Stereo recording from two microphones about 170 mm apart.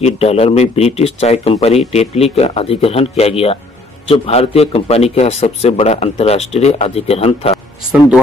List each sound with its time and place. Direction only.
0.0 s speech: 35° left (ahead or behind)